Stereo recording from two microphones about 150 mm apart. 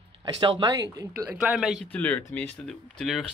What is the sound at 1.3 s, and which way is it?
Speech, 5° right (ahead or behind).